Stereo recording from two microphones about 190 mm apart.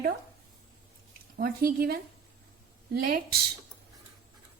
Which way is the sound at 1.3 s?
50° right (ahead or behind).